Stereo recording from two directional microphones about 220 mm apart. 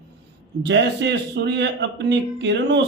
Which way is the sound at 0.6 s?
50° right (ahead or behind).